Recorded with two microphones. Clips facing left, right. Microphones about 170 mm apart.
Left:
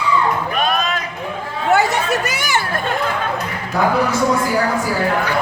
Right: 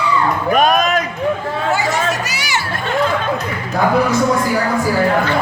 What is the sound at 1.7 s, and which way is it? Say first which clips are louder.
Chatter: left 4 dB; 60° left (ahead or behind).